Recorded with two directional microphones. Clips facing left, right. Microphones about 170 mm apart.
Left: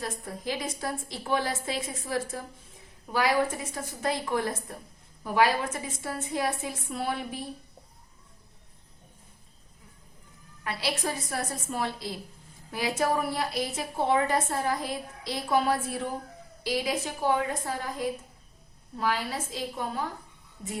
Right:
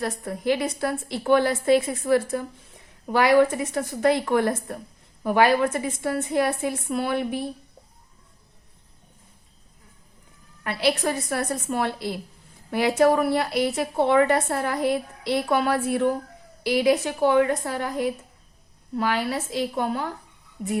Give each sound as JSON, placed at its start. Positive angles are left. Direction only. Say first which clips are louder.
{"t": 0.0, "sound": "a woman's voice", "louder": "right 7 dB", "side_deg": -65}
{"t": 10.6, "sound": "a woman's voice", "louder": "right 8 dB", "side_deg": -60}